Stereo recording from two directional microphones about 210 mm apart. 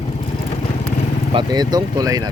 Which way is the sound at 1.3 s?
20° right (ahead or behind).